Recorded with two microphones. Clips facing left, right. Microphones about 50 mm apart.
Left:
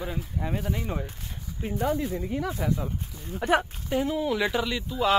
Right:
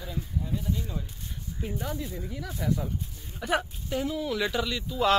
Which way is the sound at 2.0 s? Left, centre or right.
Left.